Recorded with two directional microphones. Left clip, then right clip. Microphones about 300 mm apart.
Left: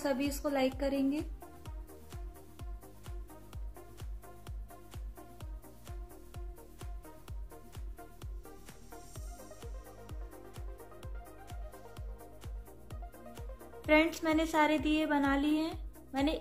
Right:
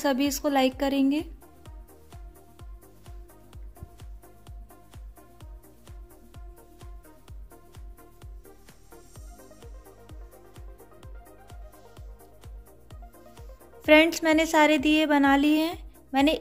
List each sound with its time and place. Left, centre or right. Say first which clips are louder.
0.0 s a woman's voice: right 8 dB; right
1.1 s music: right 8 dB; centre
5.4 s music: right 1 dB; centre
10.0 s music: even; centre
13.8 s a woman's voice: right 9 dB; right